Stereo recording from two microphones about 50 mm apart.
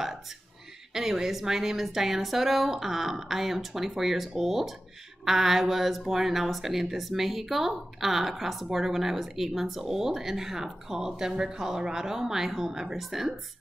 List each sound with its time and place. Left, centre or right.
0.9 s speech: centre